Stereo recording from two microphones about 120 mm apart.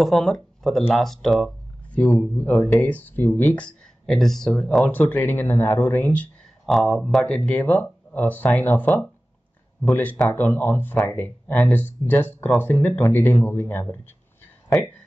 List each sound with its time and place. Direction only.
0.0 s speech: centre (ahead or behind)
6.6 s speech: centre (ahead or behind); by 13.9 s 20° left (ahead or behind)